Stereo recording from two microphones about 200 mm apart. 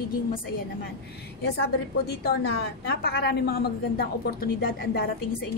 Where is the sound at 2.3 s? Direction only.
55° left (ahead or behind).